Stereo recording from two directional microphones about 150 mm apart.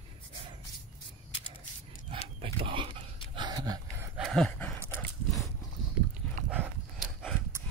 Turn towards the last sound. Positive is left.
turn(degrees=-5)  # may be behind; listen again after turning